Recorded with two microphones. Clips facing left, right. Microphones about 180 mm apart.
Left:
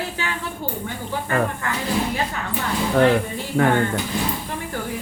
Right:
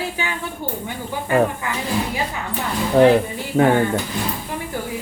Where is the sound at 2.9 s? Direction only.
20° right (ahead or behind).